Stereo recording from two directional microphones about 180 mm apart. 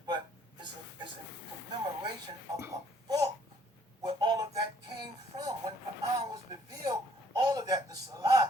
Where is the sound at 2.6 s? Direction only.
20° right (ahead or behind).